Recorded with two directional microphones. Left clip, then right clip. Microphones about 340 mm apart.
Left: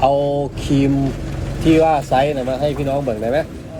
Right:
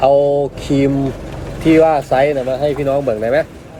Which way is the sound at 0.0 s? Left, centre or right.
Right.